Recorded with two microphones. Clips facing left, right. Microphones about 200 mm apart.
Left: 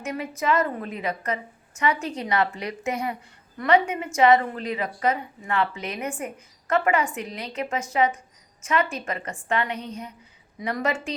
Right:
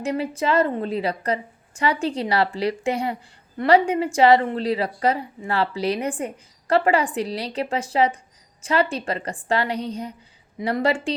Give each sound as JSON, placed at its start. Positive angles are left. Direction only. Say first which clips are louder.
{"t": 0.0, "sound": "a woman's voice", "louder": "right 4 dB", "side_deg": -30}